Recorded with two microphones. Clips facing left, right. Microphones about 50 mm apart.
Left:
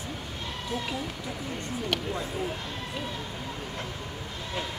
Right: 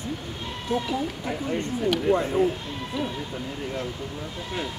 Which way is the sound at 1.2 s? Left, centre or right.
Right.